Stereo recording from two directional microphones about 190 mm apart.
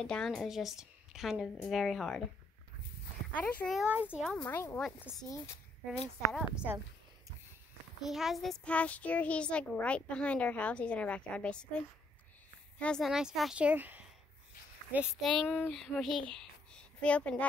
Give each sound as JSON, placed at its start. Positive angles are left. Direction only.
{"t": 0.0, "sound": "a woman's voice", "side_deg": 5}
{"t": 3.3, "sound": "a woman's voice", "side_deg": 5}
{"t": 4.5, "sound": "a child's voice", "side_deg": 15}
{"t": 6.5, "sound": "speech", "side_deg": -5}
{"t": 8.1, "sound": "a child's voice", "side_deg": 0}
{"t": 12.7, "sound": "a woman's voice", "side_deg": 5}